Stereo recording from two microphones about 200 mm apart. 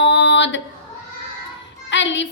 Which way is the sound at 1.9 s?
65° left (ahead or behind).